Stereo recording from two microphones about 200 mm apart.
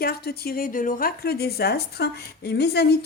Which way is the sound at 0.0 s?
50° left (ahead or behind).